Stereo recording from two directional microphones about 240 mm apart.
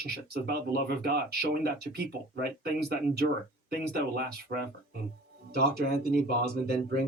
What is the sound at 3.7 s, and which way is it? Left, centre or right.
Speech, right.